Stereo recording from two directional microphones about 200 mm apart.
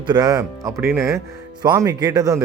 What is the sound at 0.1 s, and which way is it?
A man's voice, 20° right (ahead or behind).